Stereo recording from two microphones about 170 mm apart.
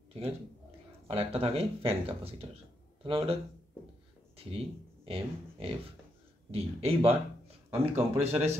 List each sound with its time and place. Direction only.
1.0 s speech: 35° right (ahead or behind)
4.5 s speech: 35° right (ahead or behind)